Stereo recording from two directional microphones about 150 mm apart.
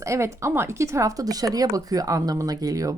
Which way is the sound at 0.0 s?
20° right (ahead or behind).